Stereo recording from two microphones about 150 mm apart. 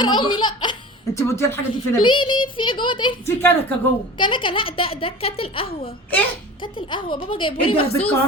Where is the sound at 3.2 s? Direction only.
15° left (ahead or behind).